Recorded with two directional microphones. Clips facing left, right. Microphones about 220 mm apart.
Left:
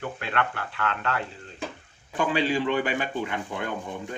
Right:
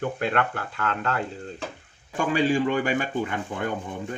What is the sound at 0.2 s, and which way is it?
A man's voice, 40° right (ahead or behind).